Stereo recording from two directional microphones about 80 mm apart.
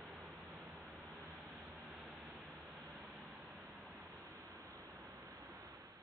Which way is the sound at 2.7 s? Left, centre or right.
Right.